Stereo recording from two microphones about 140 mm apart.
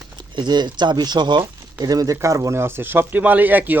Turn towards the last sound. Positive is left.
turn(degrees=-10)  # may be behind; listen again after turning